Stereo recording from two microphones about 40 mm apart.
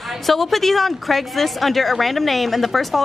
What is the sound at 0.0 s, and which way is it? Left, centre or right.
A woman's voice, centre.